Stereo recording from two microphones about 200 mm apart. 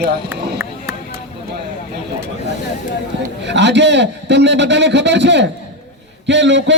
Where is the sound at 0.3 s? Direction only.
10° right (ahead or behind).